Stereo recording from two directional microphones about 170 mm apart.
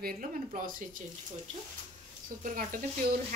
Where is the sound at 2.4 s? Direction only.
50° right (ahead or behind).